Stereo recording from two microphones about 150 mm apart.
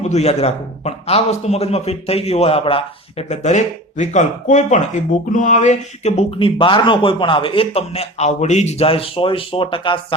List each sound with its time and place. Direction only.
0.0 s a man's voice: 45° left (ahead or behind)